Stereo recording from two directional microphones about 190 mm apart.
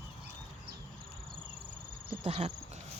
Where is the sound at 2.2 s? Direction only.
35° right (ahead or behind).